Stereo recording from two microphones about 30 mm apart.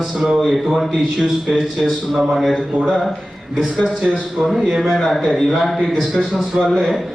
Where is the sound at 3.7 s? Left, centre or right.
Right.